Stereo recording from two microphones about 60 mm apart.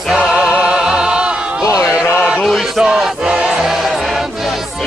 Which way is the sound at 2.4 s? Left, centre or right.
Centre.